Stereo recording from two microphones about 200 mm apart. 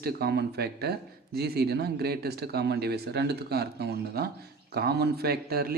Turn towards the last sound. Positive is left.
turn(degrees=-50)  # may be behind; listen again after turning